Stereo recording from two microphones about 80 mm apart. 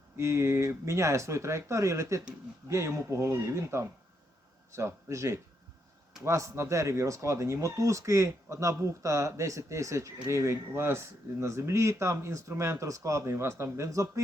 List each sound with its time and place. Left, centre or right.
0.2 s speech: right